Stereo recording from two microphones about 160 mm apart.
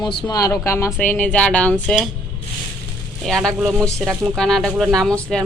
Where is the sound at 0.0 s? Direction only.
30° left (ahead or behind); by 2.0 s 10° left (ahead or behind).